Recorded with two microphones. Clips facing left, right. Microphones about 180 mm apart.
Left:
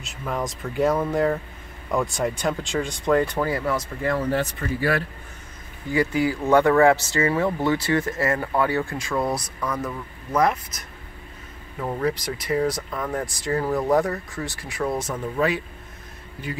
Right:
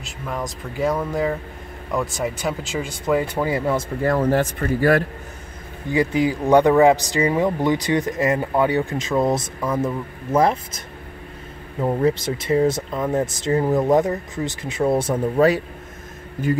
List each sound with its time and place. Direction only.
0.0 s speech: centre (ahead or behind)
3.4 s speech: 20° right (ahead or behind)
4.0 s speech: 40° right (ahead or behind)
5.9 s speech: 20° right (ahead or behind)
11.8 s speech: 25° right (ahead or behind); by 16.5 s 45° right (ahead or behind)